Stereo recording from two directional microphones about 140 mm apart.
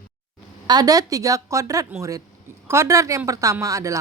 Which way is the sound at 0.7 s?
25° right (ahead or behind).